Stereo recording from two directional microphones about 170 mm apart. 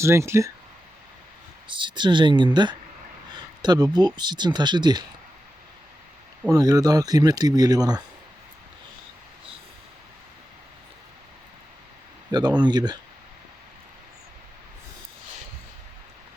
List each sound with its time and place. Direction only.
0.0 s speech: 15° right (ahead or behind)
1.6 s speech: 30° right (ahead or behind)
6.4 s speech: 20° right (ahead or behind)
12.3 s speech: 25° right (ahead or behind)